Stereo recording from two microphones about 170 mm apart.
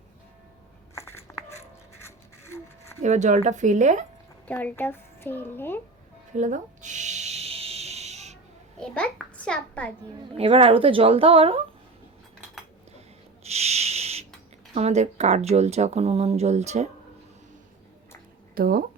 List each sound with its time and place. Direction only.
0.9 s a sound: 15° left (ahead or behind)
2.0 s toothbrush: 15° left (ahead or behind)
3.0 s speech: 45° right (ahead or behind)
4.4 s a woman's voice: 10° left (ahead or behind)
6.3 s a sound: 45° right (ahead or behind)
8.8 s a child's voice: 5° left (ahead or behind)
10.3 s speech: 35° right (ahead or behind)
13.4 s a sound: 40° right (ahead or behind)
14.8 s speech: 40° right (ahead or behind)
18.5 s speech: 60° right (ahead or behind)